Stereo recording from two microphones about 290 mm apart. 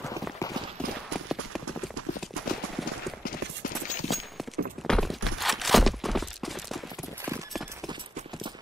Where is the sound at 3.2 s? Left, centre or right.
Left.